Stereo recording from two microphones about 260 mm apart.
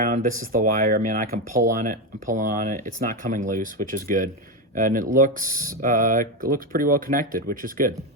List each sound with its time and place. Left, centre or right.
0.0 s speech: right